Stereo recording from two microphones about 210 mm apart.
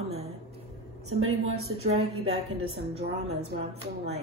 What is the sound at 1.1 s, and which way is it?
Speech, 90° right.